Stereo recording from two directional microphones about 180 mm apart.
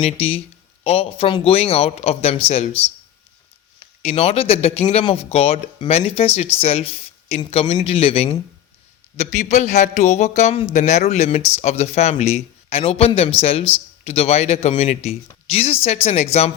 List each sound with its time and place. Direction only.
0.0 s speech: 35° left (ahead or behind)
4.0 s speech: 35° left (ahead or behind)